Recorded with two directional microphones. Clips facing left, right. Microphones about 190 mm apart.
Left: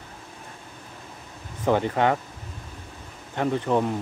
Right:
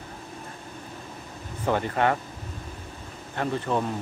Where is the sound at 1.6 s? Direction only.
15° left (ahead or behind).